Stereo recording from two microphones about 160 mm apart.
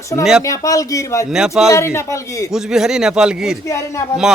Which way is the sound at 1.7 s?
15° left (ahead or behind).